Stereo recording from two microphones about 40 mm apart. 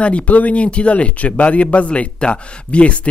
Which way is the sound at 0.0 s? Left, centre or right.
Left.